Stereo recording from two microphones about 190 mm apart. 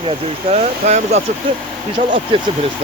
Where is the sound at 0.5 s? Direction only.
35° right (ahead or behind).